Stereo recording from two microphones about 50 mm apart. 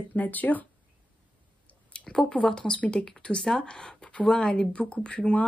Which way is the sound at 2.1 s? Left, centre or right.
Centre.